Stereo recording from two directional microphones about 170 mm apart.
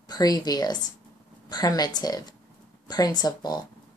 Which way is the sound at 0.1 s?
25° left (ahead or behind).